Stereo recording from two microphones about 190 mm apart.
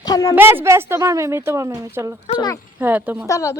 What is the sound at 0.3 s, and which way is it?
A woman's voice, 10° right (ahead or behind).